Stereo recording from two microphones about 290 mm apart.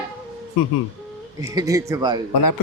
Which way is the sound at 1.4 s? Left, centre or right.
Centre.